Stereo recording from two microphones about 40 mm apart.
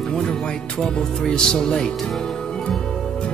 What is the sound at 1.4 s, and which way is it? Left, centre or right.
Speech, centre.